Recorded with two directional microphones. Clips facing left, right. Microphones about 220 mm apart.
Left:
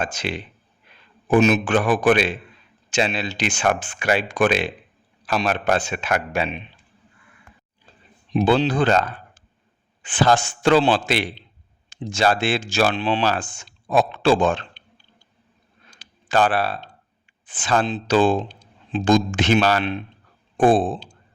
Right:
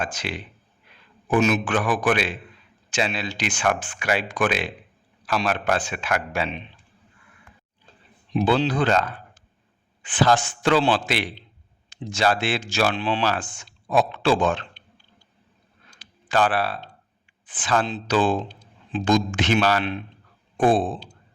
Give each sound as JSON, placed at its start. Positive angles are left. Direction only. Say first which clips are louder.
{"t": 0.0, "sound": "speech", "louder": "left 3 dB", "side_deg": 25}
{"t": 8.3, "sound": "speech", "louder": "left 3 dB", "side_deg": 20}
{"t": 15.9, "sound": "a sound", "louder": "left 2 dB", "side_deg": 25}
{"t": 17.4, "sound": "speech", "louder": "left 2 dB", "side_deg": 25}